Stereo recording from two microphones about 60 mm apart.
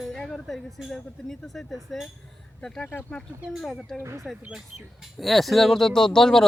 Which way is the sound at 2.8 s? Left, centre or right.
Left.